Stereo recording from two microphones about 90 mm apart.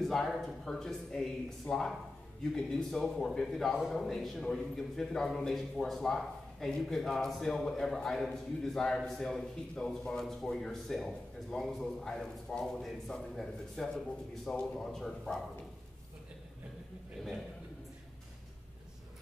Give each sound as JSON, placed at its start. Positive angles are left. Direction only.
{"t": 0.0, "sound": "a man's voice", "side_deg": 5}